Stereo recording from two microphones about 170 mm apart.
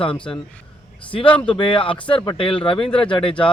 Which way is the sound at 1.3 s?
10° left (ahead or behind).